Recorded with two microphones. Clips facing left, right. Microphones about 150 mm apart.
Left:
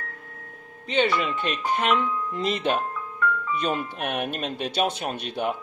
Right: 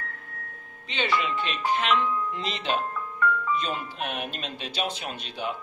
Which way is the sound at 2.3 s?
50° left (ahead or behind).